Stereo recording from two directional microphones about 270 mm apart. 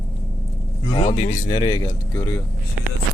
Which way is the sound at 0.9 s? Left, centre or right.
Centre.